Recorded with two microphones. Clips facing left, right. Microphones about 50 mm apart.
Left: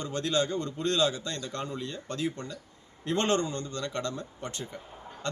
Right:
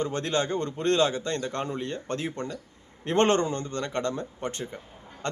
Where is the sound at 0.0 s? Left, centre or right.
Right.